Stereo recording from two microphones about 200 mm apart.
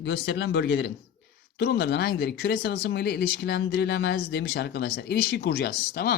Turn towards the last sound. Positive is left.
turn(degrees=50)  # may be behind; listen again after turning